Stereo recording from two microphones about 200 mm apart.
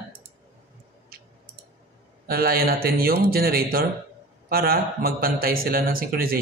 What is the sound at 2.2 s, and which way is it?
A man's voice, 50° right (ahead or behind).